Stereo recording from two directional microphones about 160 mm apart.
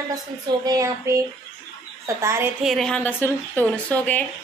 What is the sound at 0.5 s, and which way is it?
Speech, 25° right (ahead or behind).